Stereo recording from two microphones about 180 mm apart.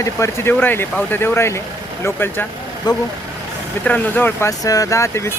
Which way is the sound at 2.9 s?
20° left (ahead or behind).